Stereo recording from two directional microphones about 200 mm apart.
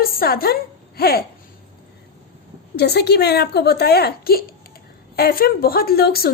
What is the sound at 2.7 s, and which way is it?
A woman's voice, 55° left (ahead or behind).